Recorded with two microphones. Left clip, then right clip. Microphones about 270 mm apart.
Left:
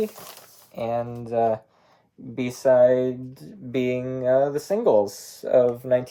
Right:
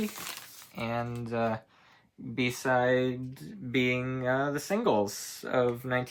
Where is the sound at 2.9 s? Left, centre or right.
Centre.